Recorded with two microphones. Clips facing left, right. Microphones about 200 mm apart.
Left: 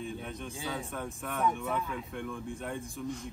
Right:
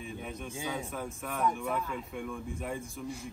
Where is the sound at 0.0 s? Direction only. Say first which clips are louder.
Left 1 dB; centre (ahead or behind).